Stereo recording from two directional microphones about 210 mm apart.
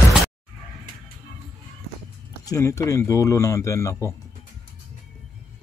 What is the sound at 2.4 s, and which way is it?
Speech, 15° left (ahead or behind).